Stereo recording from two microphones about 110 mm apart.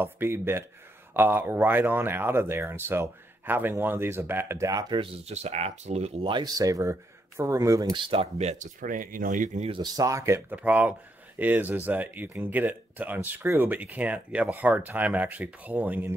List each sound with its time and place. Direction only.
0.0 s speech: 20° right (ahead or behind); by 5.0 s 35° right (ahead or behind)
5.0 s speech: 70° right (ahead or behind)
6.2 s speech: 45° right (ahead or behind)
6.6 s speech: 30° right (ahead or behind)
7.9 s speech: 50° right (ahead or behind); by 8.5 s 70° right (ahead or behind)
9.5 s speech: 90° right
9.9 s speech: 30° right (ahead or behind)
10.5 s speech: 15° right (ahead or behind)